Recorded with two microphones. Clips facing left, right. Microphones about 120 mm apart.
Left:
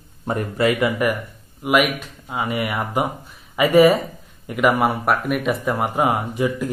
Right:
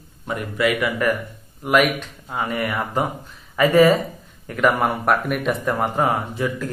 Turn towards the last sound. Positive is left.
turn(degrees=15)  # may be behind; listen again after turning